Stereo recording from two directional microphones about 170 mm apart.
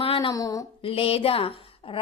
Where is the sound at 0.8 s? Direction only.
35° left (ahead or behind).